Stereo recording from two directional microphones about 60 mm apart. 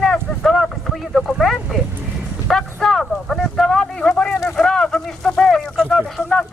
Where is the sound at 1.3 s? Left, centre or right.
Centre.